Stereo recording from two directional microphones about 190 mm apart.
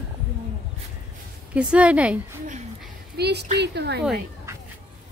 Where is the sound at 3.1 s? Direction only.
60° right (ahead or behind).